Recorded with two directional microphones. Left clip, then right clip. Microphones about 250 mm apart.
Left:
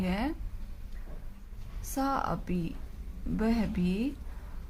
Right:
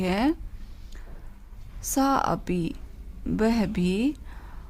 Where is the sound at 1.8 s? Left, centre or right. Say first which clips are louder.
Right 7 dB; right.